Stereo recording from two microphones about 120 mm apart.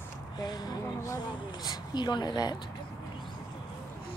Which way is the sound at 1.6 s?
35° left (ahead or behind).